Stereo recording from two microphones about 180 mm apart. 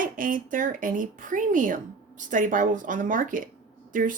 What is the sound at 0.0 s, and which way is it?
Speech, 50° right (ahead or behind).